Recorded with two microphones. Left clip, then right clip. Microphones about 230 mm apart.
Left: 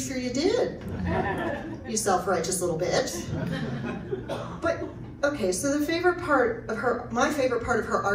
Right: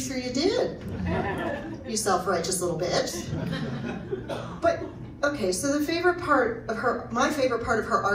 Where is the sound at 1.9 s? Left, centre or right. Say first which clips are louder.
Even; centre.